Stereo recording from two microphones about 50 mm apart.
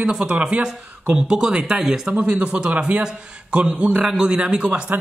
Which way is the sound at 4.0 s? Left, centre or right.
Centre.